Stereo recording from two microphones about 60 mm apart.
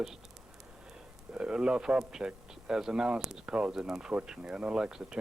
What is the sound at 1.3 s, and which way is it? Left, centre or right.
Speech, centre.